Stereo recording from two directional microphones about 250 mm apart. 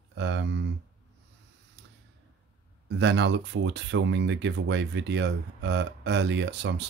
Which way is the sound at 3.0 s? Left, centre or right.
Right.